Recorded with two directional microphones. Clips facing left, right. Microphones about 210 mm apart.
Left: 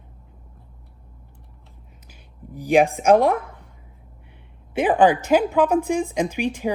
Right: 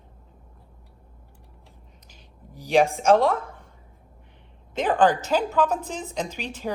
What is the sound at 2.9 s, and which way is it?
Speech, 15° left (ahead or behind).